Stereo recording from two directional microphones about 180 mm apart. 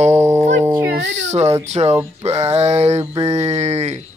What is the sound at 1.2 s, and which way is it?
Speech, 40° right (ahead or behind).